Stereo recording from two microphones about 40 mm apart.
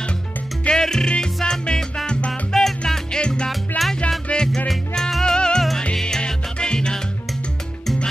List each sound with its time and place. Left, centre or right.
0.7 s music: centre
2.5 s music: centre
2.9 s music: centre
3.4 s music: centre
4.3 s music: left
5.2 s music: centre